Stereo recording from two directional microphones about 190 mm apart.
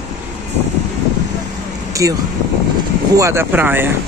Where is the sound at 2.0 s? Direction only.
15° right (ahead or behind).